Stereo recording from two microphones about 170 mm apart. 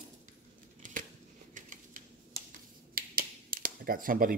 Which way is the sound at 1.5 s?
50° right (ahead or behind).